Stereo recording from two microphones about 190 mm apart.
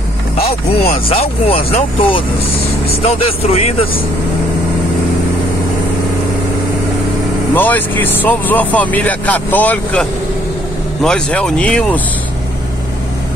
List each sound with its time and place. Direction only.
1.0 s speech: 30° left (ahead or behind)
7.5 s speech: 10° left (ahead or behind)